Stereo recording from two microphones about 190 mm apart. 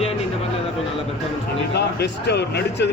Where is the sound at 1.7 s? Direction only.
60° left (ahead or behind).